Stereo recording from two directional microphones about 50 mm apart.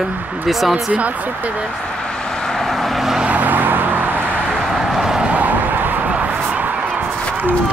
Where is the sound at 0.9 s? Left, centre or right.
Right.